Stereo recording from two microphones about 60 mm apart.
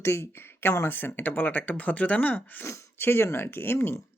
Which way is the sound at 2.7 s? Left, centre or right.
Left.